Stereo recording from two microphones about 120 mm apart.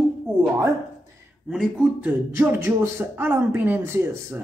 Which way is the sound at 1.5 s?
5° right (ahead or behind).